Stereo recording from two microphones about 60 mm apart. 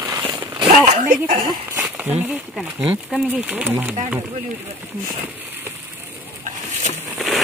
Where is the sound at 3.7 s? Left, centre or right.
Right.